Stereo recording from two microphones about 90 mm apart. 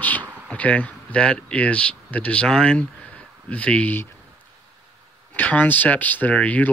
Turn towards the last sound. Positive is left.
turn(degrees=15)  # may be behind; listen again after turning